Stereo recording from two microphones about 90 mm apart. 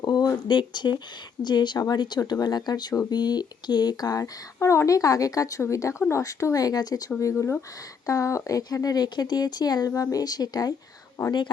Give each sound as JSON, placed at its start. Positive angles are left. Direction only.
{"t": 0.0, "sound": "speech", "side_deg": 50}
{"t": 4.2, "sound": "speech", "side_deg": 30}